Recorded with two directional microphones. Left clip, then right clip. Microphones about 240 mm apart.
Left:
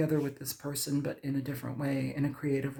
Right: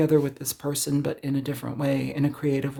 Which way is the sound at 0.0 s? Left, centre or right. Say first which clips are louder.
Right 9 dB; right.